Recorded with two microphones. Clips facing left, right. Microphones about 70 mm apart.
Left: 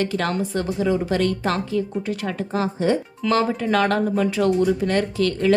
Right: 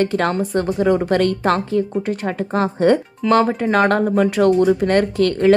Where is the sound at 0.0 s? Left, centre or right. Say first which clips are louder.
Right 5 dB; right.